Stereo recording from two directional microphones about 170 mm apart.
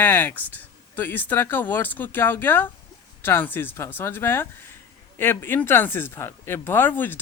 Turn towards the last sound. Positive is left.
turn(degrees=10)  # may be behind; listen again after turning